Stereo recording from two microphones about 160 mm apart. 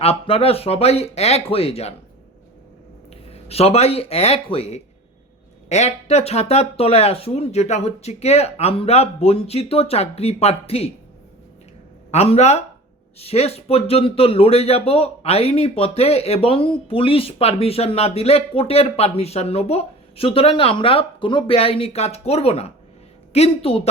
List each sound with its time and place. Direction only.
0.0 s speech: 35° left (ahead or behind)
3.1 s speech: 40° left (ahead or behind)
12.1 s speech: 40° left (ahead or behind)